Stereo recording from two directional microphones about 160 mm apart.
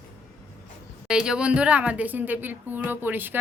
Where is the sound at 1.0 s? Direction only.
5° right (ahead or behind).